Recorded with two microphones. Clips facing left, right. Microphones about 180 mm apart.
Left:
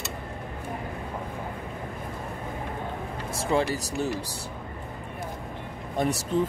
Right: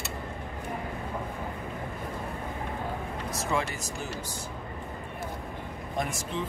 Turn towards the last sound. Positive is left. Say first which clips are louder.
# left 6 dB
turn(degrees=40)  # may be behind; listen again after turning